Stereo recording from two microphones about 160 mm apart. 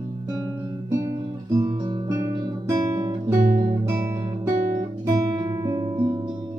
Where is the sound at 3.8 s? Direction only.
15° right (ahead or behind).